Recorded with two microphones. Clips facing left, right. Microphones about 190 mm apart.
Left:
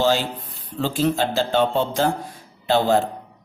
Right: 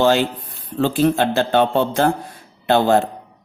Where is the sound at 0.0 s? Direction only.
60° right (ahead or behind).